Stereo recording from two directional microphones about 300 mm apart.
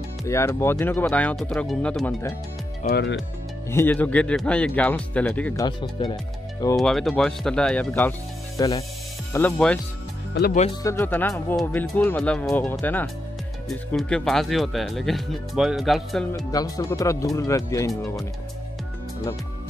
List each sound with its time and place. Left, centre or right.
0.3 s speech: centre
2.8 s speech: left
3.7 s speech: centre
6.8 s speech: centre
10.3 s speech: left
10.8 s speech: centre
16.5 s speech: centre